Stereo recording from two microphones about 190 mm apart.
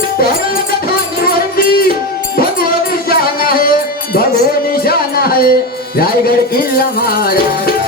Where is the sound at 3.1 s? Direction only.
50° left (ahead or behind).